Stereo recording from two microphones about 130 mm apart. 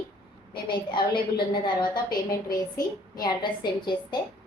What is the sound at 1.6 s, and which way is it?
A woman's voice, 35° left (ahead or behind).